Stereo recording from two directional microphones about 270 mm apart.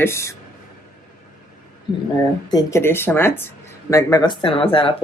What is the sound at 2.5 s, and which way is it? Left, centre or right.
Speech, centre.